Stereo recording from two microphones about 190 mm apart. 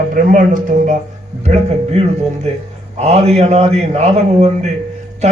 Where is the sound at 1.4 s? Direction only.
35° right (ahead or behind).